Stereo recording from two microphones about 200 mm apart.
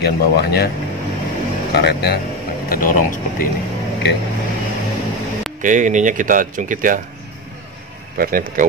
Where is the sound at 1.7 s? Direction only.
55° left (ahead or behind).